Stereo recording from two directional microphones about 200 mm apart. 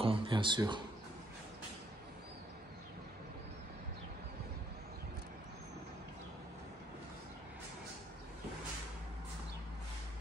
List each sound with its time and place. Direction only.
0.0 s speech: 25° right (ahead or behind)